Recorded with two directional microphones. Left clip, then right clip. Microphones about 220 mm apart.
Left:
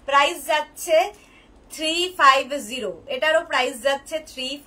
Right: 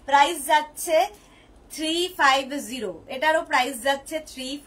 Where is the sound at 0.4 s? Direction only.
15° left (ahead or behind).